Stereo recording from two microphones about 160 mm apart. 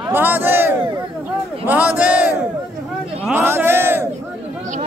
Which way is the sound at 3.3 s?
15° right (ahead or behind).